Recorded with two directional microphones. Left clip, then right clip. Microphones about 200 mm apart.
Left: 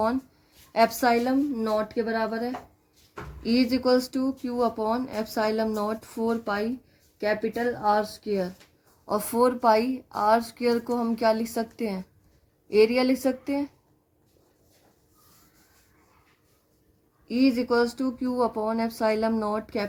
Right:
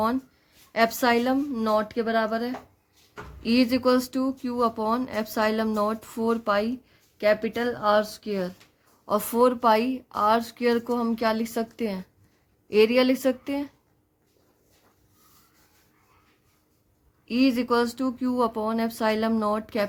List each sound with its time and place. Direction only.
0.7 s speech: 35° right (ahead or behind)
17.2 s speech: 35° right (ahead or behind)